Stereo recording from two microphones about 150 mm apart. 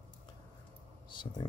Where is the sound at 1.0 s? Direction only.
30° left (ahead or behind).